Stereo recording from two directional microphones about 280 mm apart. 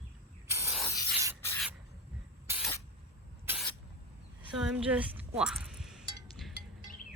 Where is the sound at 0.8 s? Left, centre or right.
Centre.